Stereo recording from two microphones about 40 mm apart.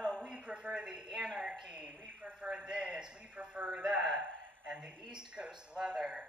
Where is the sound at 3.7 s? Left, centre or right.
Centre.